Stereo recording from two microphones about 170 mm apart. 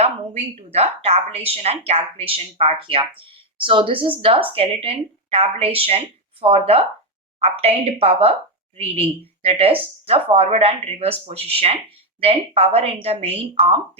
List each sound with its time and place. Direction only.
0.0 s speech: 40° right (ahead or behind)